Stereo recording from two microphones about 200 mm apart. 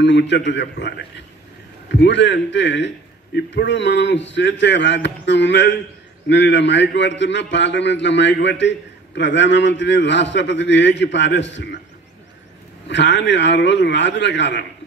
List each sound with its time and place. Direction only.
0.0 s a man's voice: 60° left (ahead or behind)
12.8 s a man's voice: 60° left (ahead or behind)